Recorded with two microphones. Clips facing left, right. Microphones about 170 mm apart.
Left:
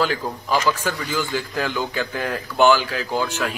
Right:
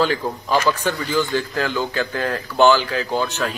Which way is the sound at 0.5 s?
10° left (ahead or behind).